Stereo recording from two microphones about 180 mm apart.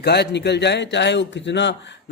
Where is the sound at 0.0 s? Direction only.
65° left (ahead or behind).